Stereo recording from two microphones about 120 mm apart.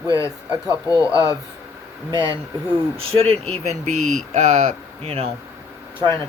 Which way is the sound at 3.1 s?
55° right (ahead or behind).